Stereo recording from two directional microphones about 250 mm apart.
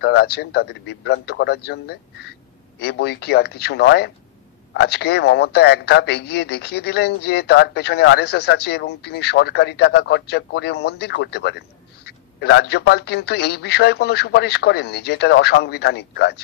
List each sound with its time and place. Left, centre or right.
0.0 s a man's voice: left